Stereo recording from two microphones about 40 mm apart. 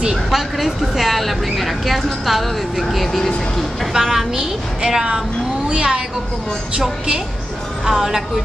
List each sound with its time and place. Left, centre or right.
0.1 s a woman's voice: centre; by 6.0 s right
7.8 s a woman's voice: centre